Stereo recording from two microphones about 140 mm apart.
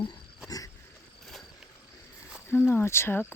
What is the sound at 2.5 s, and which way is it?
Speech, 15° left (ahead or behind).